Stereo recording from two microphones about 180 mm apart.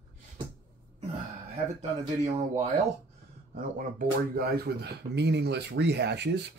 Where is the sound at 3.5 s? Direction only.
55° right (ahead or behind).